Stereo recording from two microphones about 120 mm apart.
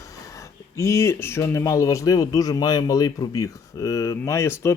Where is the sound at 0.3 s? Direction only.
25° left (ahead or behind).